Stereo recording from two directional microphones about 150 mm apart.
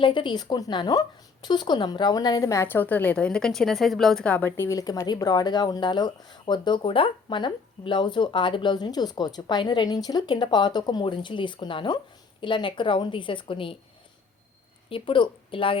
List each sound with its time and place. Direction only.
0.0 s a woman's voice: 35° left (ahead or behind)
14.8 s speech: 35° left (ahead or behind)